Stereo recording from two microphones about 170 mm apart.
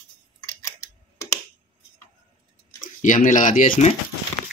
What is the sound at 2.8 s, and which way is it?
Speech, 50° left (ahead or behind).